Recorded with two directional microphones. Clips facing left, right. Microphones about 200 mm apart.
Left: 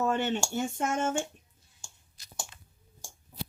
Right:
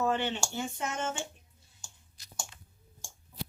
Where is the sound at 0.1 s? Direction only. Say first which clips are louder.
Left 3 dB; 45° left (ahead or behind).